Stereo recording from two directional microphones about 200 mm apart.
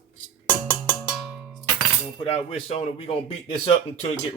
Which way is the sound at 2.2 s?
30° left (ahead or behind).